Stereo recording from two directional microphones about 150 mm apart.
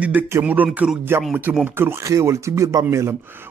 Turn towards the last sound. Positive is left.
turn(degrees=-20)  # may be behind; listen again after turning